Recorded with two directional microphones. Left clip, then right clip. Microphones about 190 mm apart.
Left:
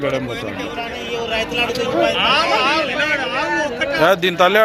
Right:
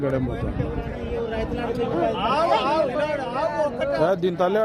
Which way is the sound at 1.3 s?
50° right (ahead or behind).